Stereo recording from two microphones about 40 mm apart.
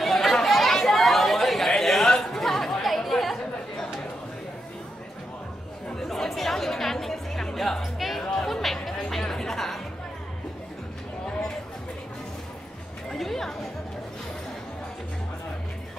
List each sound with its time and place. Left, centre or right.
0.0 s chatter: centre
5.9 s music: centre
8.4 s a sound: centre
8.8 s music: centre
13.1 s chatter: centre